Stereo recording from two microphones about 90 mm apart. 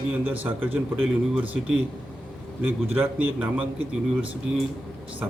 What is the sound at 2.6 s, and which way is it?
Speech, 20° right (ahead or behind).